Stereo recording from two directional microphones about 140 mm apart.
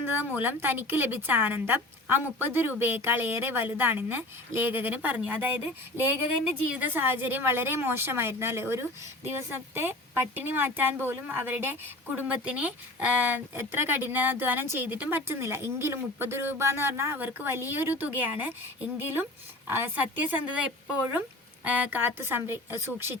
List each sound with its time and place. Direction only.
0.0 s a woman's voice: 15° right (ahead or behind)